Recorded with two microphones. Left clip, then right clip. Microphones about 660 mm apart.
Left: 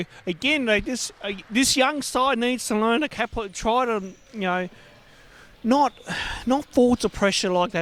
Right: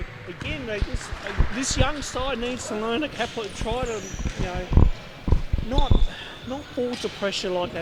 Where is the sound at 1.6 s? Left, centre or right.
Left.